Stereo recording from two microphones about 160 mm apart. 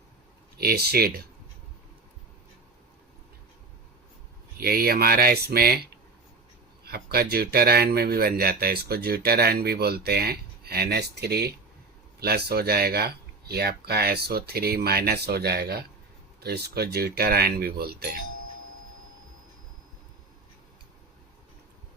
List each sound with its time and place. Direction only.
0.6 s speech: 75° right (ahead or behind)
4.5 s speech: 70° right (ahead or behind)